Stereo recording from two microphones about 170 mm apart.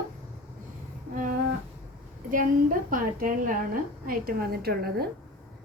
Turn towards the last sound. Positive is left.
turn(degrees=-65)  # may be behind; listen again after turning